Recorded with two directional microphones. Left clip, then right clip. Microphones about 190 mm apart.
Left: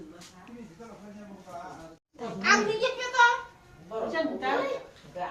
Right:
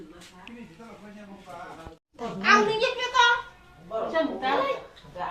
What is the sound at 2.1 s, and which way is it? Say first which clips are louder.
Speech: right 2 dB; centre (ahead or behind).